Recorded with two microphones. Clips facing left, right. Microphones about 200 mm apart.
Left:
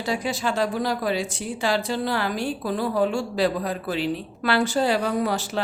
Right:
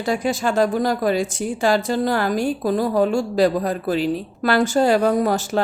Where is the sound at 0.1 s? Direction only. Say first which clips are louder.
Right 5 dB; 50° right (ahead or behind).